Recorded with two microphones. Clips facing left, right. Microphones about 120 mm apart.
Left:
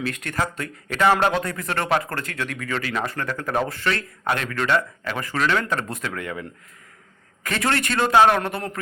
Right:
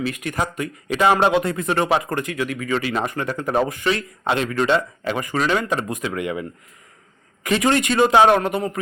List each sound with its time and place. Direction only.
0.0 s speech: 10° right (ahead or behind)
7.4 s speech: 15° right (ahead or behind)